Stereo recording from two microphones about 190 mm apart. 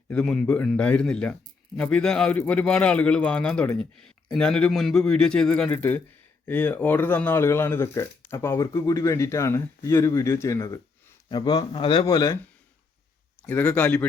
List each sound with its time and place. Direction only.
0.1 s speech: 5° left (ahead or behind)
13.5 s speech: 10° left (ahead or behind)